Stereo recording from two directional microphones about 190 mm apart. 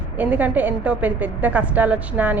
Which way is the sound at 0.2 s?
10° right (ahead or behind).